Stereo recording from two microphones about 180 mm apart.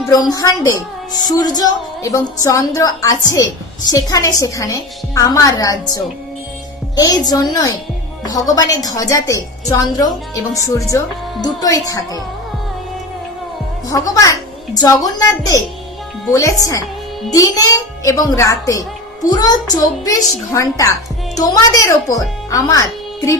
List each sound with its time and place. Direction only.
0.1 s a woman's voice: 20° left (ahead or behind)
13.9 s a woman's voice: 20° left (ahead or behind)